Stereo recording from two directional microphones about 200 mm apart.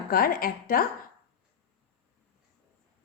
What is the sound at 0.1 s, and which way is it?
Speech, 45° left (ahead or behind).